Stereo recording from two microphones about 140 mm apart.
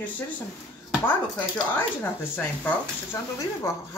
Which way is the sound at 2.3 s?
15° left (ahead or behind).